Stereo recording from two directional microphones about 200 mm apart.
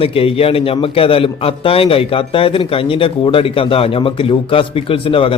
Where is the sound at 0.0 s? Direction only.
30° left (ahead or behind).